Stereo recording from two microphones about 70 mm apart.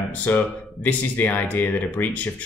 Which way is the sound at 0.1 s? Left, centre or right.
Left.